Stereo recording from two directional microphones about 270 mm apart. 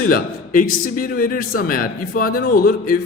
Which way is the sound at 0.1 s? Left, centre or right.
Left.